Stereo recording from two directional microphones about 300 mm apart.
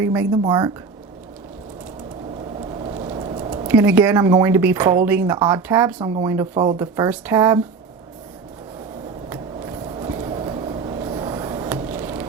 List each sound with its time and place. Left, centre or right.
0.0 s speech: centre
2.8 s a sound: centre
3.7 s speech: centre
6.5 s speech: centre
6.7 s speech: centre
9.3 s vehicle: centre